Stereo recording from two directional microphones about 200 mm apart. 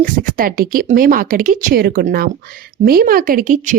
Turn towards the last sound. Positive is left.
turn(degrees=-40)  # may be behind; listen again after turning